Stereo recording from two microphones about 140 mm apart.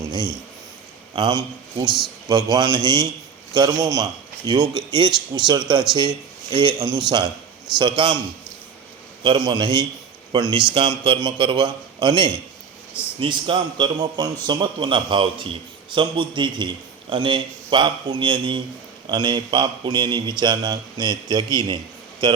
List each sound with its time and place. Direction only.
0.1 s a sound: 30° right (ahead or behind)
1.1 s a man's voice: 30° right (ahead or behind)
9.2 s a man's voice: 35° right (ahead or behind)